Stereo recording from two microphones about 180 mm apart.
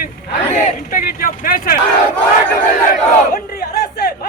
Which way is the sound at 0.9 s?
50° left (ahead or behind).